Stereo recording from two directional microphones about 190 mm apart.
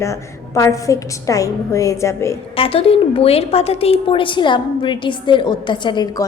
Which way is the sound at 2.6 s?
30° left (ahead or behind).